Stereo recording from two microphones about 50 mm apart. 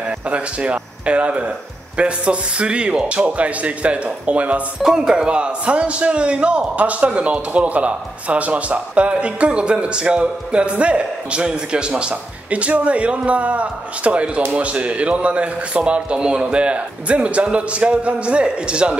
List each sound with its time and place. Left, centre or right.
0.3 s a man's voice: right
4.8 s a man's voice: centre